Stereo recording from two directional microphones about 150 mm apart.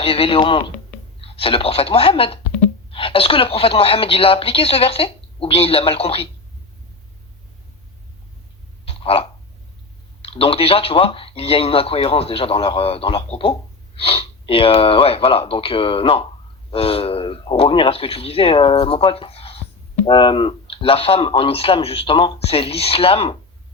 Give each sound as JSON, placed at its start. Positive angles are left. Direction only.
{"t": 0.0, "sound": "speech", "side_deg": 40}
{"t": 8.8, "sound": "a sound", "side_deg": 40}
{"t": 10.2, "sound": "speech", "side_deg": 40}